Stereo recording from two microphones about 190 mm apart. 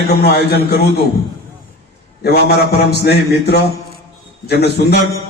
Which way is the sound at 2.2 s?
55° left (ahead or behind).